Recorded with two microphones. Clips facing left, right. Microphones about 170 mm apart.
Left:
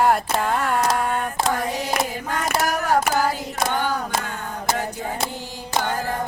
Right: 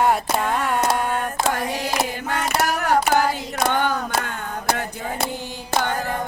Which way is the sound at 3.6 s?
60° right (ahead or behind).